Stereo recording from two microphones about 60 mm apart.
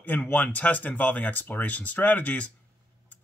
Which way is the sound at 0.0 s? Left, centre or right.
Left.